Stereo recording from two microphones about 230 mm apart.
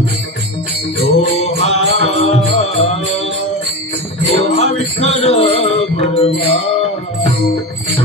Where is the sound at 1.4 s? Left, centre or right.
Left.